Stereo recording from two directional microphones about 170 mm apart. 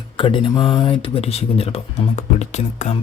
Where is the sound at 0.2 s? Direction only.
30° left (ahead or behind).